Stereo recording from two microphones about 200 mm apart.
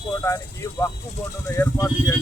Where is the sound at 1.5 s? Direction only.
20° left (ahead or behind).